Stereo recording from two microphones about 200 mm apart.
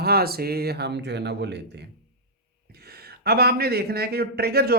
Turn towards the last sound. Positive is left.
turn(degrees=-50)  # may be behind; listen again after turning